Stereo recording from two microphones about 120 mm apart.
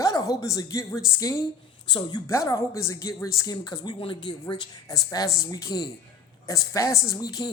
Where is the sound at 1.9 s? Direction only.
35° left (ahead or behind).